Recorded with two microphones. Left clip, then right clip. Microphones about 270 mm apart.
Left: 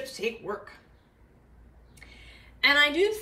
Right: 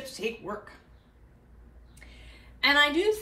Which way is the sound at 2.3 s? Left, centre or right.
Centre.